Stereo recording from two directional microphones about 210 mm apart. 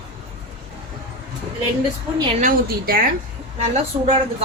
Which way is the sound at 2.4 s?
45° right (ahead or behind).